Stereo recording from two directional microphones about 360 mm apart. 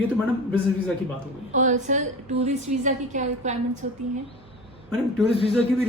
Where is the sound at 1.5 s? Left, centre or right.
Centre.